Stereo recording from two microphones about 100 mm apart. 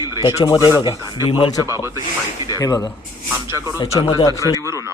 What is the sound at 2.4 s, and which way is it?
Speech, 40° left (ahead or behind).